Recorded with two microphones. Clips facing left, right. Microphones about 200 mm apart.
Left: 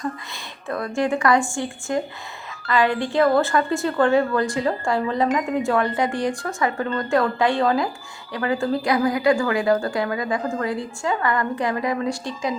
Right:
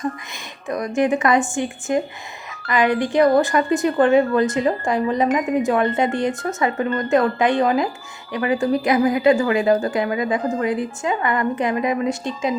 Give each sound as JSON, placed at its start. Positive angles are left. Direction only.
{"t": 0.7, "sound": "a woman's voice", "side_deg": -20}